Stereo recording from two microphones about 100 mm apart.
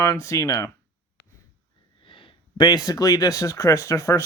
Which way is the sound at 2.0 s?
60° left (ahead or behind).